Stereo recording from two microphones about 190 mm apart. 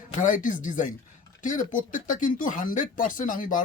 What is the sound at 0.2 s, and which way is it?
Speech, 45° left (ahead or behind).